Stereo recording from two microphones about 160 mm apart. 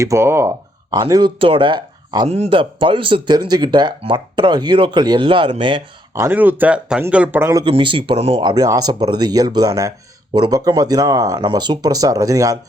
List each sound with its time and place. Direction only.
0.0 s speech: 15° right (ahead or behind); by 5.8 s 35° right (ahead or behind)
6.1 s speech: 15° right (ahead or behind)
7.6 s speech: 30° right (ahead or behind)